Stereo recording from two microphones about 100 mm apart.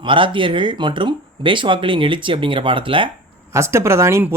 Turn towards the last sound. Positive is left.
turn(degrees=-25)  # may be behind; listen again after turning